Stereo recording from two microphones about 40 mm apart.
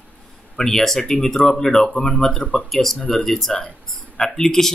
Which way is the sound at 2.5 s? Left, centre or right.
Left.